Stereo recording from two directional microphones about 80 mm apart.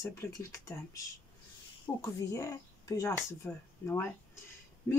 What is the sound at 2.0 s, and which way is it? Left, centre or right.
Speech, left.